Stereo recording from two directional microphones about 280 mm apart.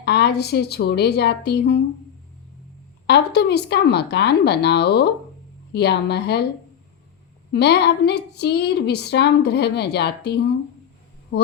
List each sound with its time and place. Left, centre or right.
0.0 s a woman's voice: left
3.1 s a woman's voice: left
7.5 s a woman's voice: left